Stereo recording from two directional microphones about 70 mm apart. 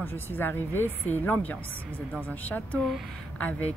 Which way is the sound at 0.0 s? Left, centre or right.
Left.